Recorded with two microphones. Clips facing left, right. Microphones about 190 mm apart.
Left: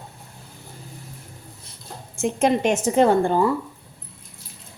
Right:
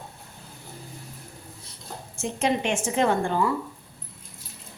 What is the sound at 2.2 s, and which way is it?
A woman's voice, 45° left (ahead or behind).